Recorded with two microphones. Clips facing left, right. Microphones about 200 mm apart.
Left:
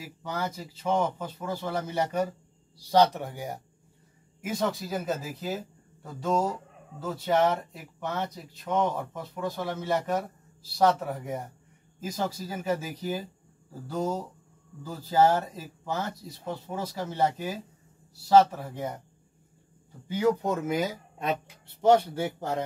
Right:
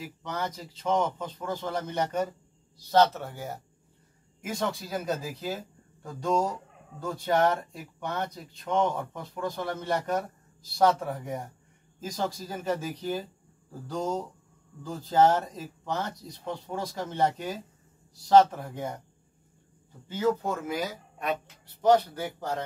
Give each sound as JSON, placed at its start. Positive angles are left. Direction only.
{"t": 0.0, "sound": "speech", "side_deg": 5}
{"t": 4.4, "sound": "speech", "side_deg": 5}
{"t": 20.1, "sound": "speech", "side_deg": 15}